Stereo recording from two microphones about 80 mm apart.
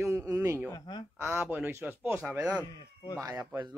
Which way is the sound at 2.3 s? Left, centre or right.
Centre.